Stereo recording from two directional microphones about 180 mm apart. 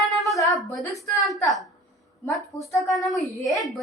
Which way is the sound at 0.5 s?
Centre (ahead or behind).